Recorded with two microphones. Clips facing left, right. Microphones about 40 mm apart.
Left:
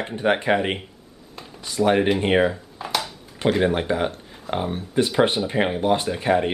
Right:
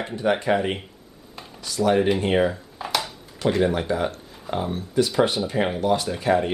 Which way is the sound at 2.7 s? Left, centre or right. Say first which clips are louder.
Even; centre.